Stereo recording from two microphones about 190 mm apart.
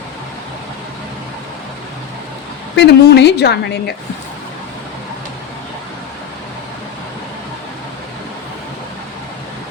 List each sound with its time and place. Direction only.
2.7 s a woman's voice: 65° left (ahead or behind)